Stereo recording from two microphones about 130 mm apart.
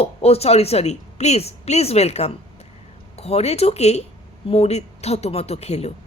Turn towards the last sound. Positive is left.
turn(degrees=55)  # may be behind; listen again after turning